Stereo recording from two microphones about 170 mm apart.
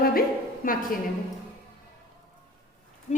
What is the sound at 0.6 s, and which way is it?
Speech, 55° left (ahead or behind).